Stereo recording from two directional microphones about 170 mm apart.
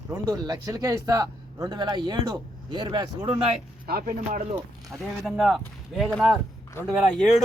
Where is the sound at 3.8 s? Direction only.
60° right (ahead or behind).